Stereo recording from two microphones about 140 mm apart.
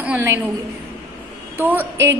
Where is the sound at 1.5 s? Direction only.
15° right (ahead or behind).